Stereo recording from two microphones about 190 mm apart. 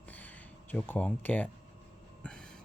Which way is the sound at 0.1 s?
10° left (ahead or behind).